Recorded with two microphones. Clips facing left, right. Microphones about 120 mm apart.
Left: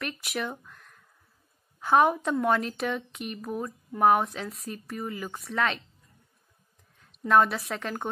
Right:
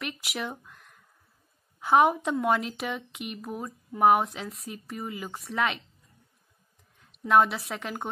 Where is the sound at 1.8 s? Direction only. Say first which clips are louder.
Even; 15° right (ahead or behind).